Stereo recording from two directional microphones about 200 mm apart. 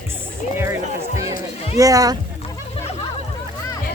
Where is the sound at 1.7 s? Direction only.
15° right (ahead or behind).